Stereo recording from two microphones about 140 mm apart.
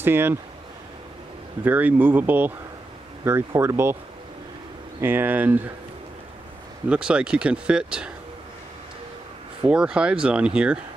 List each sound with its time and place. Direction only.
0.0 s speech: 15° right (ahead or behind)
1.6 s speech: 10° right (ahead or behind)
5.0 s speech: 15° right (ahead or behind)
6.9 s speech: 5° right (ahead or behind)
9.7 s speech: 5° right (ahead or behind)